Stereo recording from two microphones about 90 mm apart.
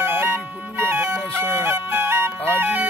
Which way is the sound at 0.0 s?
25° right (ahead or behind).